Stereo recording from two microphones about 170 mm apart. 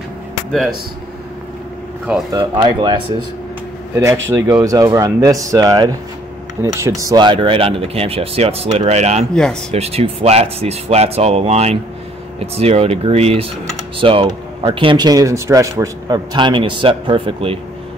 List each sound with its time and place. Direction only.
2.3 s speech: 25° right (ahead or behind)
3.9 s speech: 15° right (ahead or behind); by 9.2 s 40° right (ahead or behind)
9.3 s speech: 5° left (ahead or behind)
9.7 s speech: 35° right (ahead or behind)